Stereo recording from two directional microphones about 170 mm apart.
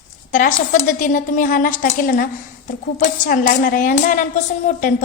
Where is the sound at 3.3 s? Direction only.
55° left (ahead or behind).